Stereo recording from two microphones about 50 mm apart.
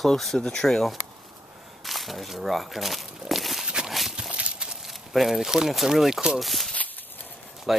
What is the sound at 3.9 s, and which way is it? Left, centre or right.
Clip-clop, centre.